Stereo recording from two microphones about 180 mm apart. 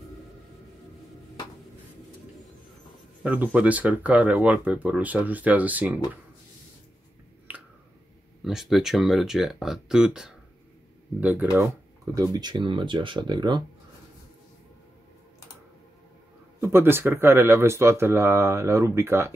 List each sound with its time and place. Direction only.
3.3 s speech: 10° right (ahead or behind)
8.5 s speech: centre (ahead or behind); by 13.6 s 25° right (ahead or behind)
16.6 s speech: 15° right (ahead or behind)